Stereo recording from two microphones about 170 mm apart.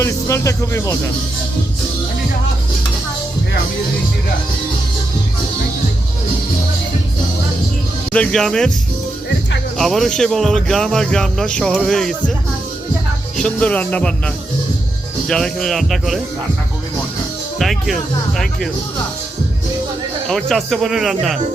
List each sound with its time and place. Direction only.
0.0 s speech: 15° left (ahead or behind)
8.1 s speech: 5° left (ahead or behind)
9.7 s speech: centre (ahead or behind)
13.3 s music: 5° left (ahead or behind)
15.3 s speech: 5° left (ahead or behind)
17.6 s speech: centre (ahead or behind)
20.2 s speech: centre (ahead or behind)